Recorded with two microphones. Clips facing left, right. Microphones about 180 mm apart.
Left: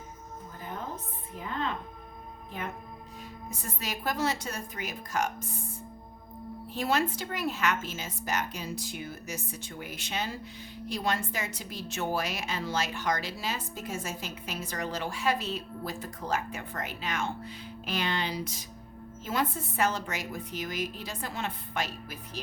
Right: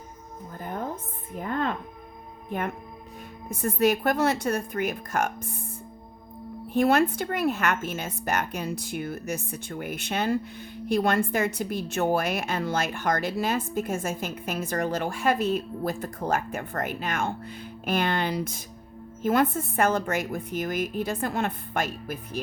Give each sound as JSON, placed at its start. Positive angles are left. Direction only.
{"t": 1.4, "sound": "a sound", "side_deg": -50}
{"t": 2.5, "sound": "a woman's voice", "side_deg": -60}
{"t": 6.7, "sound": "a woman's voice", "side_deg": -55}